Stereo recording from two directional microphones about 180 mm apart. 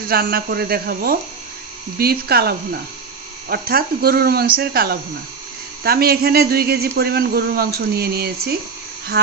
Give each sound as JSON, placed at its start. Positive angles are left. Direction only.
{"t": 0.1, "sound": "speech", "side_deg": -55}